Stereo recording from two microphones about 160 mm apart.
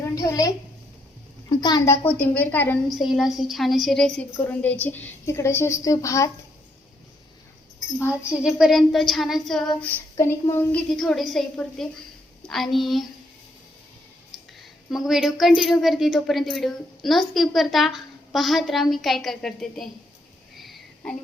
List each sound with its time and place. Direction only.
0.0 s a sound: 20° left (ahead or behind)
1.5 s a woman's voice: 25° left (ahead or behind)
2.9 s a woman's voice: centre (ahead or behind); by 6.3 s 20° left (ahead or behind)
8.0 s a woman's voice: 5° right (ahead or behind)
10.2 s a woman's voice: 15° left (ahead or behind)
10.9 s a woman's voice: centre (ahead or behind)
14.8 s a woman's voice: centre (ahead or behind)
20.6 s a sound: 5° left (ahead or behind)